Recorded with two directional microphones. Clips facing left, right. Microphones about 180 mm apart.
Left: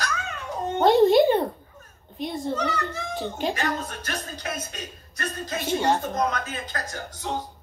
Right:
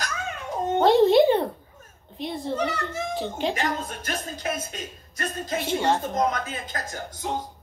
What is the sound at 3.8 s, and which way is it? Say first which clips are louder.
Speech: right 1 dB; 20° right (ahead or behind).